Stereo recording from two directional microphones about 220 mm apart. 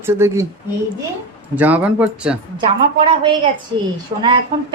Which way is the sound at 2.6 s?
25° right (ahead or behind).